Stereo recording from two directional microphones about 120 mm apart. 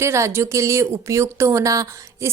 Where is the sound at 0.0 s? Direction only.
20° right (ahead or behind).